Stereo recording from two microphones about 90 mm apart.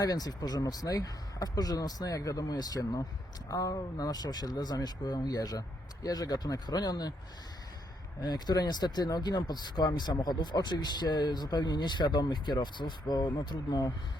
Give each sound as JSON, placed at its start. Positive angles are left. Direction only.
{"t": 0.0, "sound": "speech", "side_deg": 45}
{"t": 8.2, "sound": "speech", "side_deg": 50}